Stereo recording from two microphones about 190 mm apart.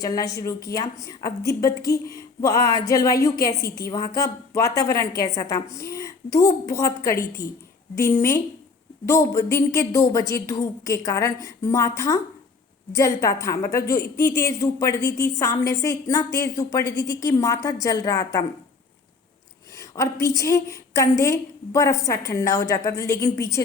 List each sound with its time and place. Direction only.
0.0 s a woman's voice: 20° left (ahead or behind)
19.7 s a sound: 15° left (ahead or behind)
20.2 s a woman's voice: 15° left (ahead or behind)